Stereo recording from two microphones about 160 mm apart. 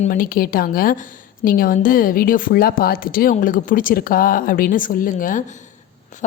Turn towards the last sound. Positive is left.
turn(degrees=55)  # may be behind; listen again after turning